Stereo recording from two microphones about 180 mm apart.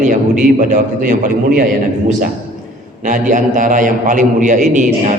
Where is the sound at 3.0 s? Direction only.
45° right (ahead or behind).